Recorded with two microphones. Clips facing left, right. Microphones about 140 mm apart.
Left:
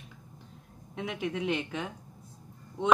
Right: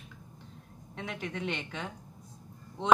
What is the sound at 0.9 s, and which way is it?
Speech, 5° left (ahead or behind).